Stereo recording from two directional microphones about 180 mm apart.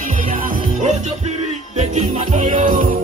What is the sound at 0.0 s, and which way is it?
Music, 45° right (ahead or behind).